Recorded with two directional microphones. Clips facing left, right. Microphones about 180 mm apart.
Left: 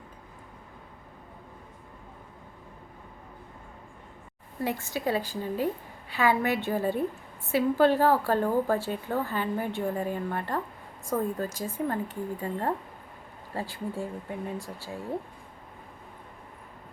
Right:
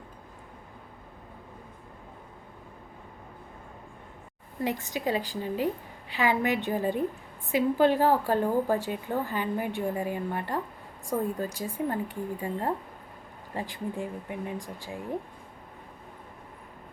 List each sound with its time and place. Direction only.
4.6 s a woman's voice: 15° right (ahead or behind)